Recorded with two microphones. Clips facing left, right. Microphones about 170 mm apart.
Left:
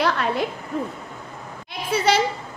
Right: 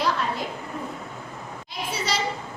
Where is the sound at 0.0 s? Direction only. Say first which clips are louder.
Left 4 dB; 70° left (ahead or behind).